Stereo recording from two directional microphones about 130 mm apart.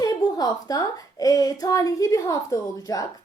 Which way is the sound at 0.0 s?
30° left (ahead or behind).